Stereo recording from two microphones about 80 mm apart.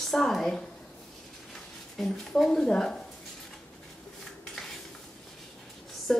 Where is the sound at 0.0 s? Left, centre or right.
Centre.